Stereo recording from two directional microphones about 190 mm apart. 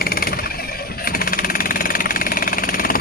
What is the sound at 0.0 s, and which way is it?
Jackhammer, 55° left (ahead or behind).